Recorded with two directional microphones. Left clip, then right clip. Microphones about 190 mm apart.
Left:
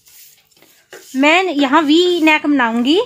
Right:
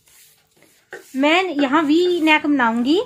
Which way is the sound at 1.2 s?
45° left (ahead or behind).